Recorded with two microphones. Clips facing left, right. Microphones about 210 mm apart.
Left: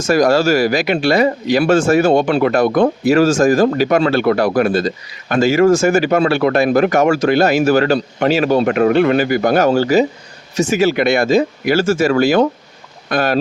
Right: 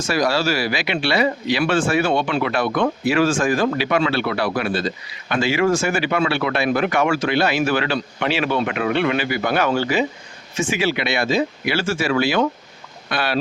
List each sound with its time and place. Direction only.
0.0 s speech: 45° left (ahead or behind)